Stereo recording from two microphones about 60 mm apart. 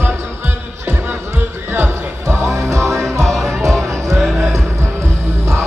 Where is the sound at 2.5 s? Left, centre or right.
Right.